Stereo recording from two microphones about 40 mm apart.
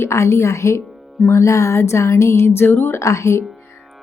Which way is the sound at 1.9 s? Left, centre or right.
Left.